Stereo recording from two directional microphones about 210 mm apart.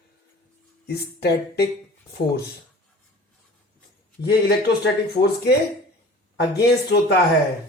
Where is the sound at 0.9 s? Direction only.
50° left (ahead or behind).